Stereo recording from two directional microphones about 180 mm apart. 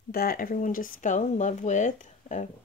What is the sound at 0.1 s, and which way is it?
Speech, 55° left (ahead or behind).